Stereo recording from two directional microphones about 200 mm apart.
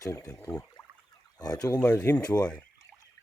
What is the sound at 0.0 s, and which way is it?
Speech, 15° left (ahead or behind).